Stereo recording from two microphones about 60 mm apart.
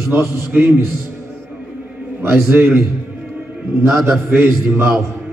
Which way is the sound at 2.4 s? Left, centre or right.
Right.